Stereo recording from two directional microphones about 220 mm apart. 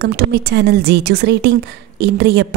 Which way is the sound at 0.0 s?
45° right (ahead or behind).